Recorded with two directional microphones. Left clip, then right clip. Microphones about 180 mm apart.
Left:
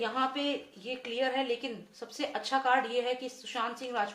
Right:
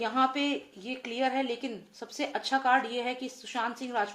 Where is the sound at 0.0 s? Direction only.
45° right (ahead or behind).